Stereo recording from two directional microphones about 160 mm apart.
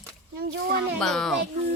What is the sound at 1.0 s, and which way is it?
Speech, 5° left (ahead or behind).